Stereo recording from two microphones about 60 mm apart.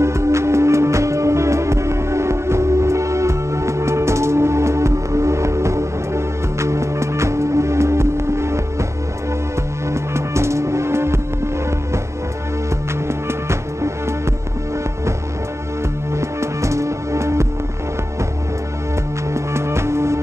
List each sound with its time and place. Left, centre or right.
0.0 s music: right
9.8 s music: right
13.3 s music: right
16.2 s music: right
19.3 s music: right